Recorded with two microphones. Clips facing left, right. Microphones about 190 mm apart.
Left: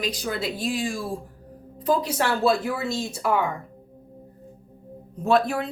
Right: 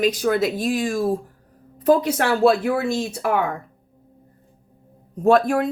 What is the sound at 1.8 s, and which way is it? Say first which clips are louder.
Speech: right 5 dB; 60° right (ahead or behind).